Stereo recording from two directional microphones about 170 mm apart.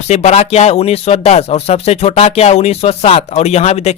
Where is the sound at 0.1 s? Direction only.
40° left (ahead or behind).